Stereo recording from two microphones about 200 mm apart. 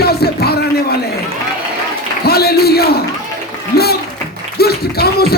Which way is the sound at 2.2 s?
50° left (ahead or behind).